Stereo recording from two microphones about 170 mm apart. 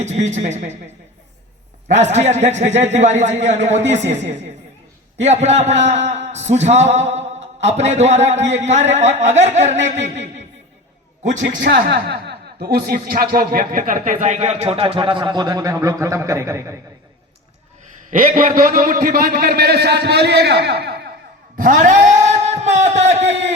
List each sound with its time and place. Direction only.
0.0 s speech: 45° right (ahead or behind)
1.9 s a man's voice: 40° right (ahead or behind)
11.7 s a man's voice: 70° right (ahead or behind); by 16.7 s 15° right (ahead or behind)
18.1 s a man's voice: 55° right (ahead or behind)
21.5 s speech: 50° right (ahead or behind)